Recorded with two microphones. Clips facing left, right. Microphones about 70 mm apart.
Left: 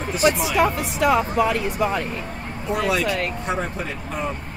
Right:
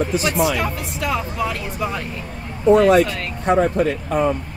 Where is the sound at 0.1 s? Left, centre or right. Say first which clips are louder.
Left 2 dB; left.